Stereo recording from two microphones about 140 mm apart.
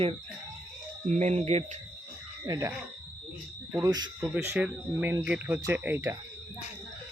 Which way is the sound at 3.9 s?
30° right (ahead or behind).